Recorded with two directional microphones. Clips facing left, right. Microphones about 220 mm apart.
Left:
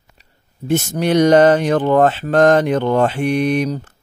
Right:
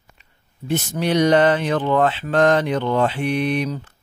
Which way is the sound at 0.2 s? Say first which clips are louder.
Left 5 dB; 45° left (ahead or behind).